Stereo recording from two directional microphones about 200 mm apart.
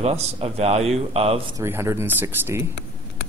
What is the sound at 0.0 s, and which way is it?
A man's voice, 30° right (ahead or behind).